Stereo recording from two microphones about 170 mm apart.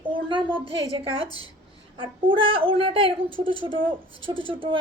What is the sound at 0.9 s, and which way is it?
A woman's voice, 35° right (ahead or behind).